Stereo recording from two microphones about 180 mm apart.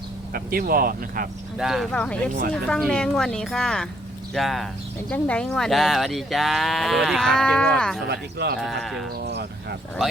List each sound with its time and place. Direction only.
0.3 s speech: 55° right (ahead or behind)
1.5 s speech: centre (ahead or behind)
8.0 s speech: 65° right (ahead or behind)
8.8 s speech: centre (ahead or behind)
9.2 s a sound: 65° right (ahead or behind)